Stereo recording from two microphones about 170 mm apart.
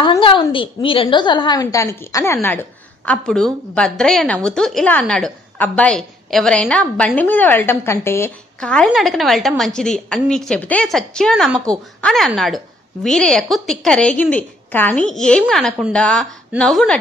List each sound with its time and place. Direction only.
0.0 s a woman's voice: 25° left (ahead or behind)
3.1 s a woman's voice: 5° left (ahead or behind)